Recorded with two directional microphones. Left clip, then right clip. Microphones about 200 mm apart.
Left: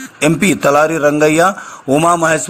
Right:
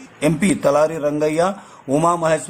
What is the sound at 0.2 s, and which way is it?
A man's voice, 15° left (ahead or behind).